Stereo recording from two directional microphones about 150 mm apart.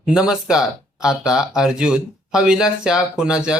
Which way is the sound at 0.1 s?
5° right (ahead or behind).